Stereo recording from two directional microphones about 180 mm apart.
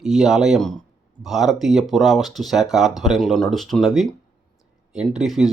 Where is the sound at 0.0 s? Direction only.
Centre (ahead or behind).